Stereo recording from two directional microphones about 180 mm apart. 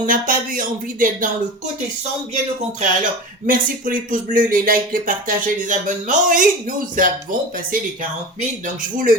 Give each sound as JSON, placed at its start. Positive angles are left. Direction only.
{"t": 0.0, "sound": "speech", "side_deg": -50}
{"t": 3.0, "sound": "speech", "side_deg": -50}